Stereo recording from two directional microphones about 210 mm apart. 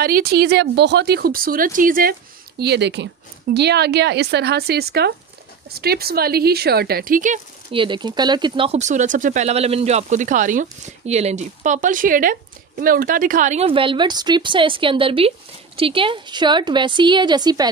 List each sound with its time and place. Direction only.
0.0 s speech: 45° right (ahead or behind)
2.6 s speech: 55° right (ahead or behind)
7.7 s speech: 25° right (ahead or behind)